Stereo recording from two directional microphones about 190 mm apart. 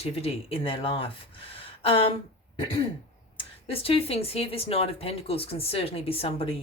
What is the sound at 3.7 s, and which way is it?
Speech, 30° left (ahead or behind).